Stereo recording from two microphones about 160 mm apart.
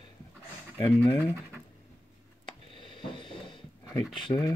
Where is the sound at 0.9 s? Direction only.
15° right (ahead or behind).